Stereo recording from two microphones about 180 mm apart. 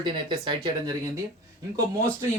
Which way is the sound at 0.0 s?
25° right (ahead or behind).